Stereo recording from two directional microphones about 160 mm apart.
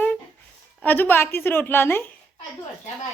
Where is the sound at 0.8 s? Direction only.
10° left (ahead or behind).